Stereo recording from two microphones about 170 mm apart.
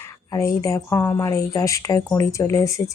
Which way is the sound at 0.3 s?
20° left (ahead or behind).